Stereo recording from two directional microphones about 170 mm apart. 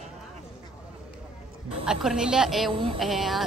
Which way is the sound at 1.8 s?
5° right (ahead or behind).